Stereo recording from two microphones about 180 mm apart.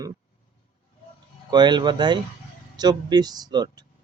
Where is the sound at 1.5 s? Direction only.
25° right (ahead or behind).